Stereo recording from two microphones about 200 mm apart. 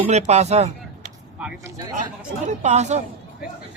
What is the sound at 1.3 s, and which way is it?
Speech, 5° right (ahead or behind).